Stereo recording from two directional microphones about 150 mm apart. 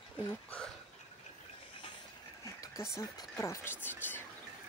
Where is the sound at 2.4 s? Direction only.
20° left (ahead or behind).